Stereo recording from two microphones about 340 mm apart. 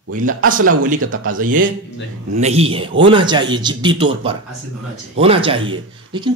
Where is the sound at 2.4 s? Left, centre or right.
Centre.